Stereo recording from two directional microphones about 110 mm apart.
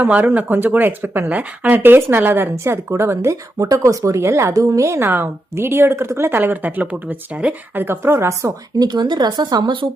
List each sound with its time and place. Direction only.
0.0 s speech: 15° right (ahead or behind); by 9.8 s 45° right (ahead or behind)